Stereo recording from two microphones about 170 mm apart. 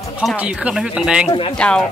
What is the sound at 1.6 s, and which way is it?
Speech, 5° left (ahead or behind).